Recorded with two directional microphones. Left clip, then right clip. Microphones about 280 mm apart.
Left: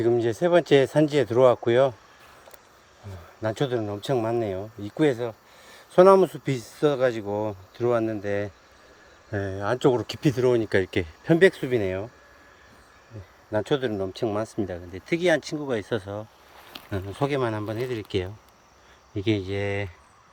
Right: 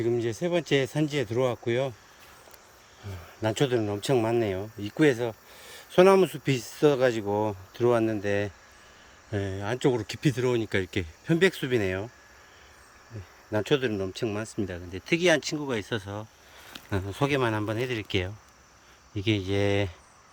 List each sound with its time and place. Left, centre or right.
0.0 s speech: centre
3.4 s speech: centre
13.5 s speech: centre
19.5 s speech: right